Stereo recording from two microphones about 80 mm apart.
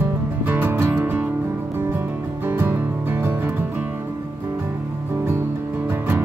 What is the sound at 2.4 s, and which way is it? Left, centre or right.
Music, right.